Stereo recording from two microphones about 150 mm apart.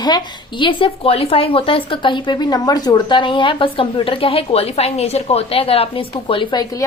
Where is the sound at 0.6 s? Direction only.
35° left (ahead or behind).